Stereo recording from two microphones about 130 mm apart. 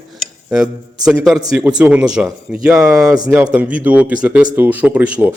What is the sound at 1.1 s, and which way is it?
Speech, 5° right (ahead or behind).